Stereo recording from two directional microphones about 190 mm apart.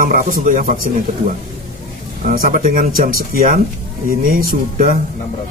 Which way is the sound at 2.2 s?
45° right (ahead or behind).